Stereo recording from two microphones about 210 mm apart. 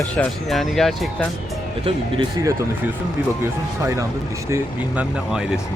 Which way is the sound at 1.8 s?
20° right (ahead or behind).